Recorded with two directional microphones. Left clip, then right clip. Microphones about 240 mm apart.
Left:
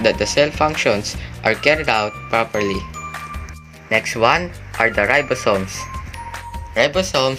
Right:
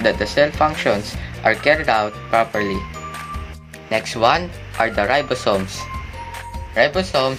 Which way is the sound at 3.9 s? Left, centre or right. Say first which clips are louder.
Left 1 dB; centre.